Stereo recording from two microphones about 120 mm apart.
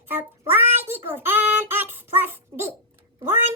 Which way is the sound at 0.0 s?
20° right (ahead or behind).